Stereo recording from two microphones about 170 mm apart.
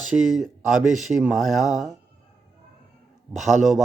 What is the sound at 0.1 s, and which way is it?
Speech, centre (ahead or behind).